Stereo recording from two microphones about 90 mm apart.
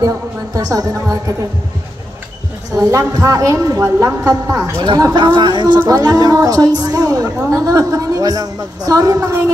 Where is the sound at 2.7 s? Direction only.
40° right (ahead or behind).